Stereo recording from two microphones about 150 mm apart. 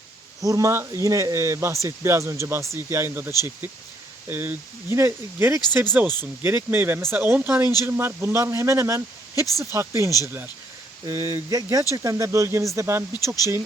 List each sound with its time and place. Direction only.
0.4 s speech: 20° right (ahead or behind)
13.1 s speech: 25° left (ahead or behind)